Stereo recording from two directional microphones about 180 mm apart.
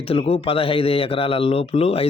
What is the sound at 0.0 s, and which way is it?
Speech, 35° left (ahead or behind).